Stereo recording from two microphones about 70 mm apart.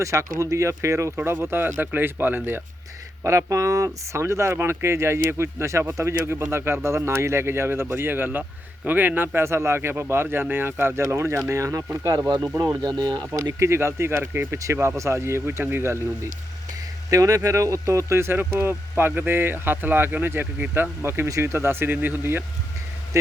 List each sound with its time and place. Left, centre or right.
0.0 s speech: right
1.1 s speech: right
3.2 s speech: right
12.0 s speech: right
12.8 s speech: right
13.4 s speech: right
17.1 s speech: right